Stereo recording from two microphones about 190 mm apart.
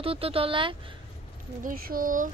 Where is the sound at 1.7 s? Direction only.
50° right (ahead or behind).